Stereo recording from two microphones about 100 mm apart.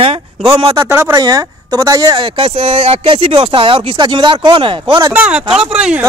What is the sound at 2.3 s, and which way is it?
Speech, 70° right (ahead or behind).